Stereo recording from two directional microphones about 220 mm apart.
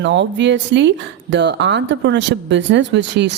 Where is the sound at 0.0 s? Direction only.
55° right (ahead or behind).